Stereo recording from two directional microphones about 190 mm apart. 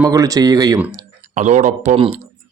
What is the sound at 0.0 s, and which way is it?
Speech, 20° right (ahead or behind).